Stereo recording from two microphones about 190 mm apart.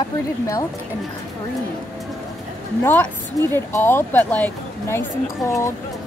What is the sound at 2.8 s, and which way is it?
Speech, 10° left (ahead or behind).